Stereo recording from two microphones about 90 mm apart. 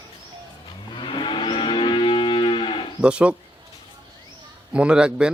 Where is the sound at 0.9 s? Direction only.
65° left (ahead or behind).